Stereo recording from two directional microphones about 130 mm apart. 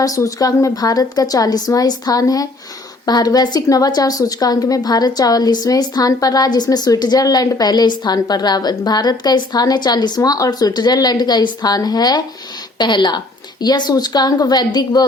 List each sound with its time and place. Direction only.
0.0 s a woman's voice: 25° left (ahead or behind)